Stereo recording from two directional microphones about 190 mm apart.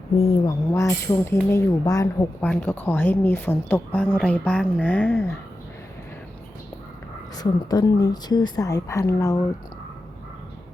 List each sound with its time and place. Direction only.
0.4 s speech: 15° left (ahead or behind)
7.3 s a woman's voice: 20° left (ahead or behind)